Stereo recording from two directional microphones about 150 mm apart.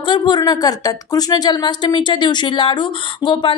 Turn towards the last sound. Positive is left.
turn(degrees=35)  # may be behind; listen again after turning